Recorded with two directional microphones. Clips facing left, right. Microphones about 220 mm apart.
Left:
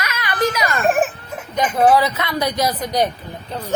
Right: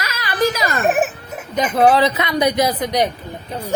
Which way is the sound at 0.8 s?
5° right (ahead or behind).